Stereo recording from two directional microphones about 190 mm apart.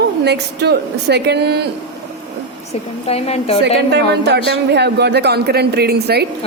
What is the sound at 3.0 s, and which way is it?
Speech, 30° left (ahead or behind).